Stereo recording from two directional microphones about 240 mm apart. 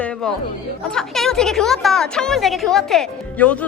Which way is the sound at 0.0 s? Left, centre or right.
Centre.